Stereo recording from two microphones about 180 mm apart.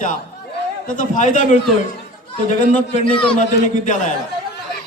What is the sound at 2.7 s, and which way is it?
Speech, 35° left (ahead or behind).